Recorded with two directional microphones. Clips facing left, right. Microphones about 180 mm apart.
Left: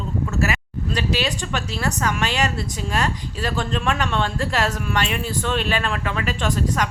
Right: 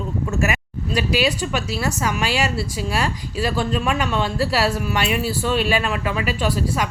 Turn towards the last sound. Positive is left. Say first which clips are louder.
# right 1 dB
turn(degrees=-10)  # may be behind; listen again after turning